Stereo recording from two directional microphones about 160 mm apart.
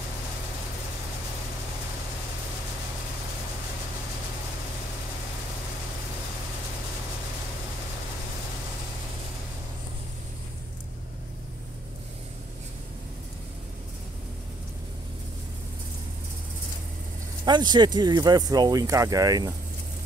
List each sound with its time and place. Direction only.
17.5 s speech: 25° right (ahead or behind)